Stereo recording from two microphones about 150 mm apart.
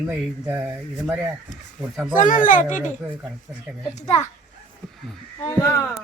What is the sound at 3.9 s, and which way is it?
Speech, 50° left (ahead or behind).